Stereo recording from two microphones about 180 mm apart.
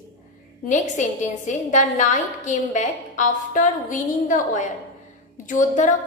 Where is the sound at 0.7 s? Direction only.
45° left (ahead or behind).